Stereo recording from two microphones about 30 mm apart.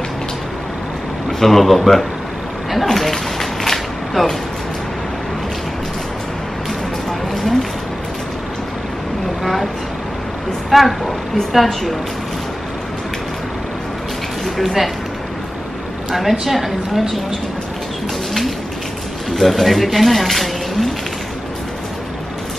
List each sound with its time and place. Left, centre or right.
1.4 s a woman's voice: centre
2.7 s a sound: centre
9.4 s vehicle: centre
10.7 s a woman's voice: centre
14.4 s speech: centre
16.2 s a woman's voice: centre
19.3 s speech: centre